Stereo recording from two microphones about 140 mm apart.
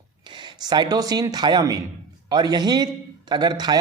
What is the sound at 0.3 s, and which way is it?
A man's voice, 35° right (ahead or behind).